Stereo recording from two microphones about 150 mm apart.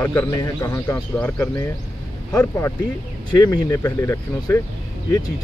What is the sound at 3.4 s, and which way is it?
Speech, 25° left (ahead or behind).